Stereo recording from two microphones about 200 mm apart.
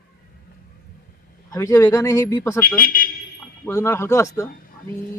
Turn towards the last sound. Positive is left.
turn(degrees=15)  # may be behind; listen again after turning